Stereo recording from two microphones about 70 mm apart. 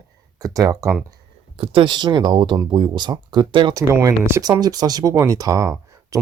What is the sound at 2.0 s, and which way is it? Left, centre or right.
Speech, right.